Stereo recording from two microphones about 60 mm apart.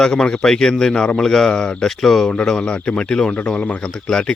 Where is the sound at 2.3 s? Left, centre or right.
Centre.